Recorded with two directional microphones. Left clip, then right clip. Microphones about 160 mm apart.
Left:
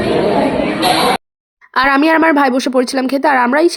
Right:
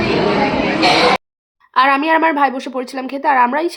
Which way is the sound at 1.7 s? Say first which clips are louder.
Left 1 dB; 40° left (ahead or behind).